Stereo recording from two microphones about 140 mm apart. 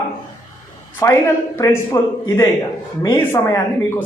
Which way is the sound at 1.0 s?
25° left (ahead or behind).